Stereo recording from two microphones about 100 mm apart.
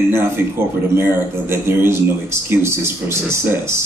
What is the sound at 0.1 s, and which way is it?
Speech, 25° right (ahead or behind).